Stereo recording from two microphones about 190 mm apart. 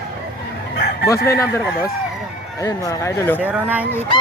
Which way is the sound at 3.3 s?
10° right (ahead or behind).